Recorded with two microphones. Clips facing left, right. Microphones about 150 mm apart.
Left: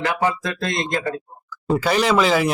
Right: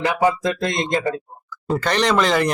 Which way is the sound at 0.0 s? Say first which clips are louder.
Right 3 dB; 15° right (ahead or behind).